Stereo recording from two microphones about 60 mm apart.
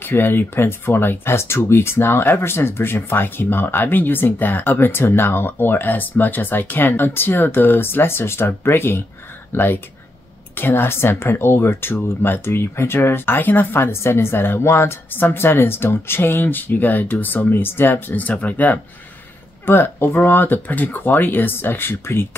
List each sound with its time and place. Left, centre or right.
0.0 s speech: left
19.6 s speech: left